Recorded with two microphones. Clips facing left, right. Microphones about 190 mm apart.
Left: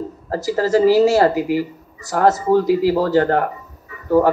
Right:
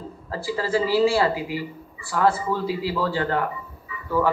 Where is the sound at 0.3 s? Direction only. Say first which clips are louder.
Left 7 dB; 45° left (ahead or behind).